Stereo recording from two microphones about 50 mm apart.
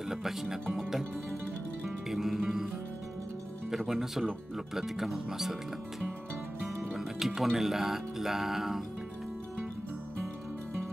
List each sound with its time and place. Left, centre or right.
0.1 s speech: centre
1.9 s music: centre
3.7 s speech: centre